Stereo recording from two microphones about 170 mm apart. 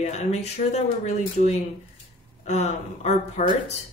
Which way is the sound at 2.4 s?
40° left (ahead or behind).